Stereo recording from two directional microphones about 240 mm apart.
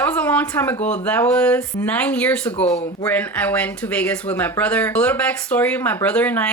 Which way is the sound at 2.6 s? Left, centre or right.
Left.